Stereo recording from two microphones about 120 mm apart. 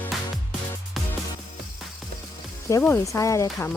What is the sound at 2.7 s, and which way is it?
Speech, 20° left (ahead or behind).